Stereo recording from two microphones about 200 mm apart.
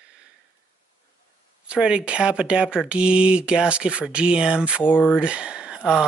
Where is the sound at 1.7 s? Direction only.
5° right (ahead or behind).